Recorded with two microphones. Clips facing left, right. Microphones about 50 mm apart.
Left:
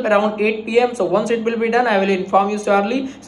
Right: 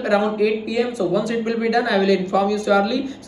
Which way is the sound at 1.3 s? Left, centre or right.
Left.